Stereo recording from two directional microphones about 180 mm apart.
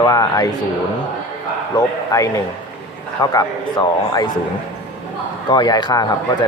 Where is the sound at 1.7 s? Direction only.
20° left (ahead or behind).